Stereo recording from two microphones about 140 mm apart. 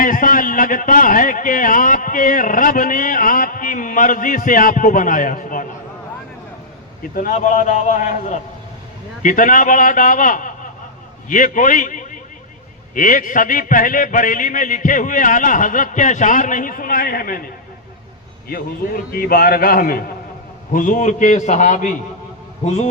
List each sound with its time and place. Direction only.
0.0 s a man's voice: 75° left (ahead or behind)
7.0 s a man's voice: 90° left
7.3 s a man's voice: 65° left (ahead or behind); by 17.4 s 90° left
18.4 s a man's voice: 90° left
20.7 s a man's voice: 70° left (ahead or behind)
22.6 s a man's voice: 50° left (ahead or behind)